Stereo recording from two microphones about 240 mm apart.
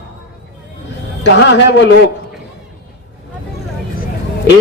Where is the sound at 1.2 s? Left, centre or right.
Left.